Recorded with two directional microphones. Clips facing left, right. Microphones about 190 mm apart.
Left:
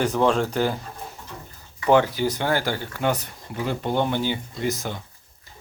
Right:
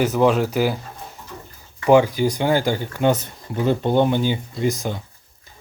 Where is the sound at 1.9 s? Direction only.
15° right (ahead or behind).